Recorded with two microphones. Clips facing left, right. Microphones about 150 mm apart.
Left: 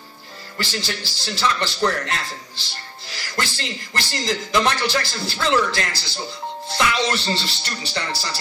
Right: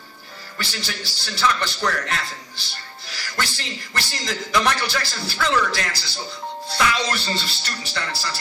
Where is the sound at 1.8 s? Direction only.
25° left (ahead or behind).